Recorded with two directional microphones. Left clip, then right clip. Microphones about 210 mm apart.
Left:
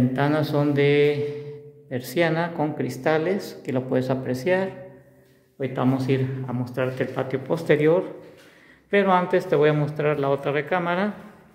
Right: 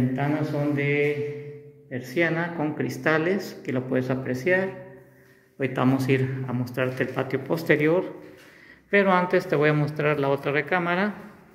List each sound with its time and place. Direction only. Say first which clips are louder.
0.1 s a woman's voice: left 4 dB; 30° left (ahead or behind); by 4.6 s 10° left (ahead or behind)
5.6 s a man's voice: even; centre (ahead or behind)